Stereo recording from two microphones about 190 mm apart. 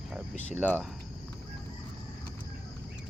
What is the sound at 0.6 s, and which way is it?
Speech, 5° left (ahead or behind).